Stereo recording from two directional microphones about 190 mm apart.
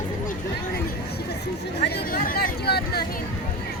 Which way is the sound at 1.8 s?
60° left (ahead or behind).